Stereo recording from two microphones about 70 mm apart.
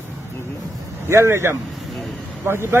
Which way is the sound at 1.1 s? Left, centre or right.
Right.